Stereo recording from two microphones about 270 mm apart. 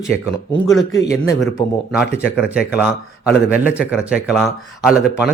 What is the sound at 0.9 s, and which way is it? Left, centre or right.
Speech, centre.